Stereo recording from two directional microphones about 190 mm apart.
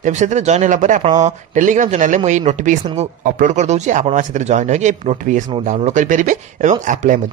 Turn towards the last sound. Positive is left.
turn(degrees=-40)  # may be behind; listen again after turning